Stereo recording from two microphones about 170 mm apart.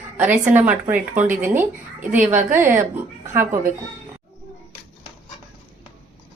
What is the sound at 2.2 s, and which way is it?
Speech, 50° right (ahead or behind).